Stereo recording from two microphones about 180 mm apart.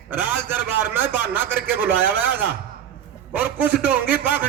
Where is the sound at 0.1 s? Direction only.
10° right (ahead or behind).